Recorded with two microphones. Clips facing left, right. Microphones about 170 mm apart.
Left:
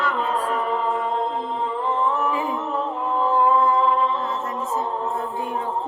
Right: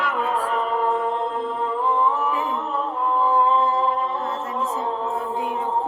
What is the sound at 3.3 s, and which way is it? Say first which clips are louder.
Singing: left 1 dB; 30° right (ahead or behind).